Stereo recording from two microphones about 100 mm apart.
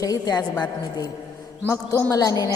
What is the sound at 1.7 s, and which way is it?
Speech, 25° left (ahead or behind).